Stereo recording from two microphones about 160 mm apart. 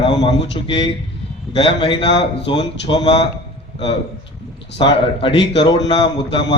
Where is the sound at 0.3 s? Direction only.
90° left.